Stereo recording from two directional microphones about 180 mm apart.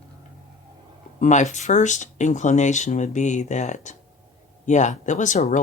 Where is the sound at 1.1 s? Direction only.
40° left (ahead or behind).